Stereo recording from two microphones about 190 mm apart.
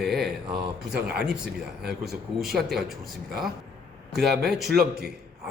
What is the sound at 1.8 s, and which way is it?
Speech, 60° right (ahead or behind).